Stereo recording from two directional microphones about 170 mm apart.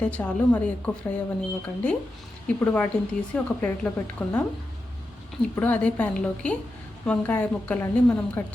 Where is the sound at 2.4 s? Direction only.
10° left (ahead or behind).